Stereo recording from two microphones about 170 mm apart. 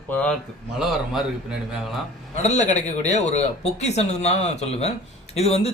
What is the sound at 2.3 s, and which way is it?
A man's voice, 45° left (ahead or behind).